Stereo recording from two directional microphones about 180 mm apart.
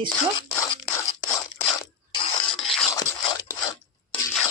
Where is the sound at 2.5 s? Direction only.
Centre (ahead or behind).